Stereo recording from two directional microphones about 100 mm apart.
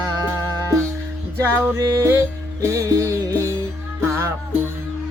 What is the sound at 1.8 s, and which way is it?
Music, 35° right (ahead or behind).